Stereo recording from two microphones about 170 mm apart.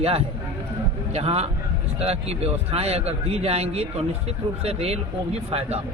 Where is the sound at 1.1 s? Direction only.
35° right (ahead or behind).